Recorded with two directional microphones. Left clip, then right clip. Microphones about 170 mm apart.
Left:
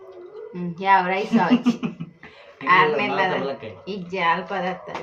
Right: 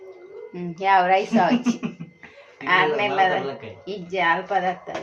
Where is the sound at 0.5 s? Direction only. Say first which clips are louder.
Left 1 dB; 30° right (ahead or behind).